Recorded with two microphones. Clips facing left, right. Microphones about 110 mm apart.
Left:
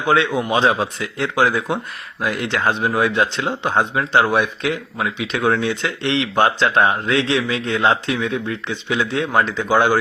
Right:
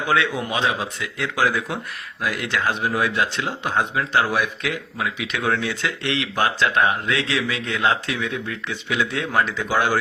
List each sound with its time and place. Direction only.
0.1 s speech: 30° left (ahead or behind)